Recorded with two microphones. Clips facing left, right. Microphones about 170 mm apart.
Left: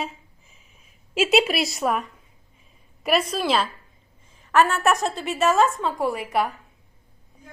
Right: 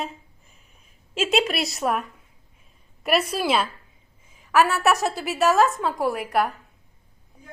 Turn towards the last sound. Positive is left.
turn(degrees=0)  # may be behind; listen again after turning